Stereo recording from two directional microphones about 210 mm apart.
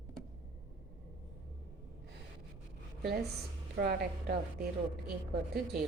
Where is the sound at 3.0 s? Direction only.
50° right (ahead or behind).